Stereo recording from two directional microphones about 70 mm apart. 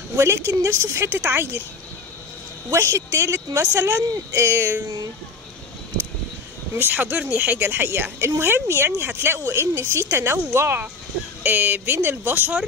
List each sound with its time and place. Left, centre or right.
0.5 s speech: right
2.7 s speech: right
6.8 s speech: right
11.4 s speech: right